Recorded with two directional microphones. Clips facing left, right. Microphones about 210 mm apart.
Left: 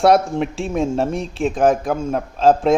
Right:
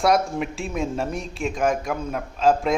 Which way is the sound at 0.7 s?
30° left (ahead or behind).